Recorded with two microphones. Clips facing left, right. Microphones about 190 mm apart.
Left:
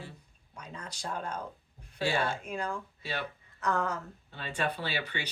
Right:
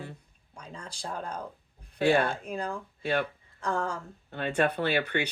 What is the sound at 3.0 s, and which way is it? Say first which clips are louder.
Speech: right 11 dB; 55° right (ahead or behind).